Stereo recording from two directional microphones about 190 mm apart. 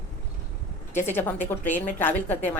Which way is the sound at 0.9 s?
10° left (ahead or behind).